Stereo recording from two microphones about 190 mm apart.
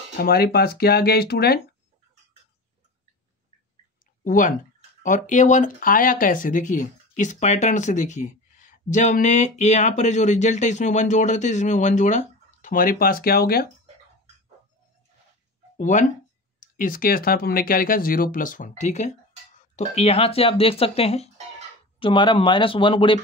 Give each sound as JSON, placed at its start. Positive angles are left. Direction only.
{"t": 0.2, "sound": "speech", "side_deg": 55}
{"t": 4.2, "sound": "speech", "side_deg": 45}
{"t": 15.8, "sound": "speech", "side_deg": 40}